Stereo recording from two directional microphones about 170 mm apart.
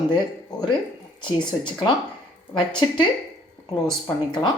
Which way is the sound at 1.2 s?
25° left (ahead or behind).